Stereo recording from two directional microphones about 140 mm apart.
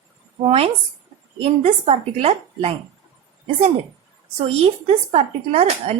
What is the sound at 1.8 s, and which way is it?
Speech, 45° right (ahead or behind).